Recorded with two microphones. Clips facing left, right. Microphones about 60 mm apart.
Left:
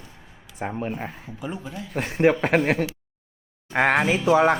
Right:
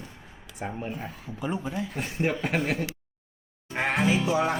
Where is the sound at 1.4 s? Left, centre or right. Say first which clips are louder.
Right 3 dB; centre.